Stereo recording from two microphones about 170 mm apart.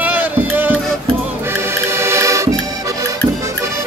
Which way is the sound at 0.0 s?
10° right (ahead or behind).